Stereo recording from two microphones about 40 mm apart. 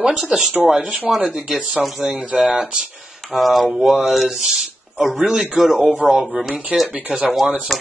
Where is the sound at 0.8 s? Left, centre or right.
Right.